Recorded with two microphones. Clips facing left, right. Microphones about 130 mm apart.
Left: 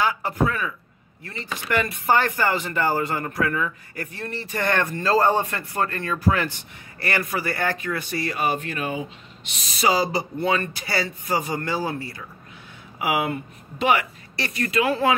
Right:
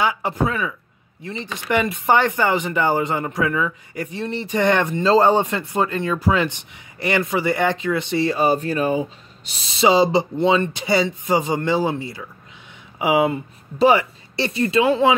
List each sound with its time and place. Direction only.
0.0 s speech: 20° right (ahead or behind)